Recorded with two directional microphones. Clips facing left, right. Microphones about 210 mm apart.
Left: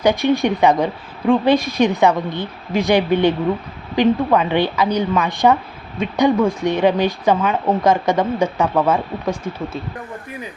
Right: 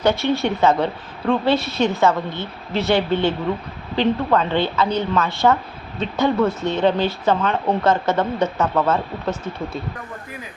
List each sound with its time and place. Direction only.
0.0 s speech: 15° left (ahead or behind)